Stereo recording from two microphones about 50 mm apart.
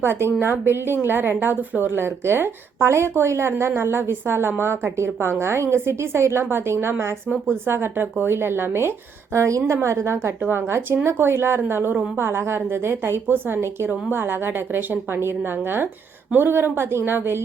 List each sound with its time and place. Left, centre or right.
0.0 s a woman's voice: right
7.7 s a woman's voice: right
9.3 s a woman's voice: right
10.5 s a woman's voice: right
16.3 s a woman's voice: right